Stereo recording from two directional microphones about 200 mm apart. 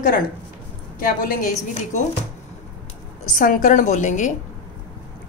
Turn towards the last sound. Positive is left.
turn(degrees=40)  # may be behind; listen again after turning